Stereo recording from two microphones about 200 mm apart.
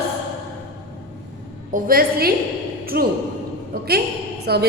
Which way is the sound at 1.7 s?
45° right (ahead or behind).